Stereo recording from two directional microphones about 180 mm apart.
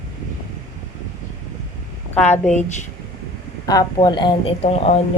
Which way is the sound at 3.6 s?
20° left (ahead or behind).